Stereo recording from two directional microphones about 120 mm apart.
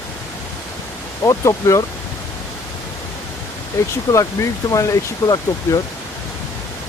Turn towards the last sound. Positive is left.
turn(degrees=30)  # may be behind; listen again after turning